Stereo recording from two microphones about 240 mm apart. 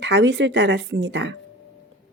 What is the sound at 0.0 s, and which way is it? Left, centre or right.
A woman's voice, right.